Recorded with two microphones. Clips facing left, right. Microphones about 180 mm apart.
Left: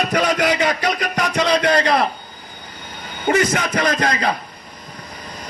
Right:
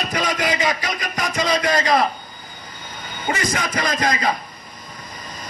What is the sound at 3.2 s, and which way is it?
A man's voice, 60° left (ahead or behind).